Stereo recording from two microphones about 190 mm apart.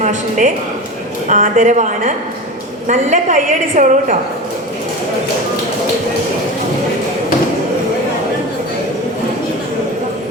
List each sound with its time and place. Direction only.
0.0 s a woman's voice: 40° right (ahead or behind)